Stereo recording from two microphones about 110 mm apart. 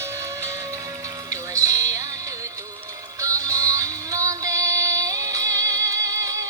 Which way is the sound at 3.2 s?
30° right (ahead or behind).